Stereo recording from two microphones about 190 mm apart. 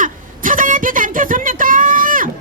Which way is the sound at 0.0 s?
45° right (ahead or behind).